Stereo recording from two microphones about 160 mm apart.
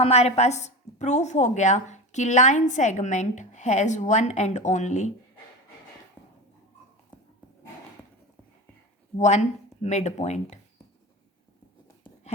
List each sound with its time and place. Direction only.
0.0 s a woman's voice: 40° left (ahead or behind)
9.1 s a woman's voice: 45° left (ahead or behind)